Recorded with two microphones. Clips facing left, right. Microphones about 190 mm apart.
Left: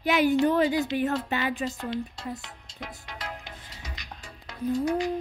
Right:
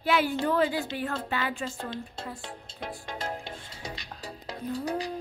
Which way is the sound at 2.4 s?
30° right (ahead or behind).